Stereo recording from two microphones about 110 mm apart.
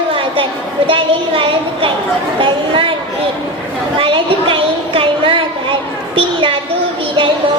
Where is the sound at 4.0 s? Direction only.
55° right (ahead or behind).